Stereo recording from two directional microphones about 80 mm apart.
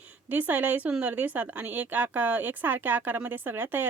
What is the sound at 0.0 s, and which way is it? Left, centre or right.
A woman's voice, right.